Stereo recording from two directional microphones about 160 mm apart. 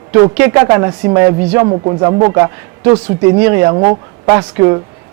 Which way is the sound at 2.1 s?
20° right (ahead or behind).